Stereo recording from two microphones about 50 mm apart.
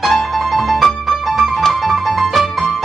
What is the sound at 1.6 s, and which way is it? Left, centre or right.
Music, centre.